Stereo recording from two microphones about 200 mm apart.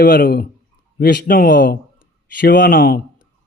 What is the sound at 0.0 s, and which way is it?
Speech, 45° left (ahead or behind).